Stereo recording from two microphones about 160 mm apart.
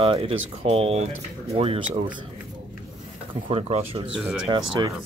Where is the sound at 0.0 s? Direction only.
35° right (ahead or behind).